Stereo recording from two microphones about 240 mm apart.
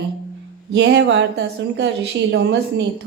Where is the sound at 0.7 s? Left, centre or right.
Right.